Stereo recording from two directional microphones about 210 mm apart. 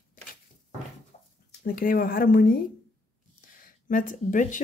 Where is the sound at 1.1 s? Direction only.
30° left (ahead or behind).